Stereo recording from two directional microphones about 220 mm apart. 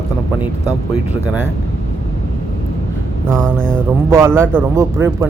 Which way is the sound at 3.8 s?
10° right (ahead or behind).